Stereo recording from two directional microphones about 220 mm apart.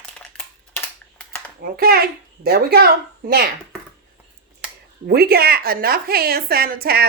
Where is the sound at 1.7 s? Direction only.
45° right (ahead or behind).